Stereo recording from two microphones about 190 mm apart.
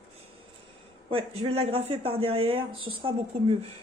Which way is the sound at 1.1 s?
30° right (ahead or behind).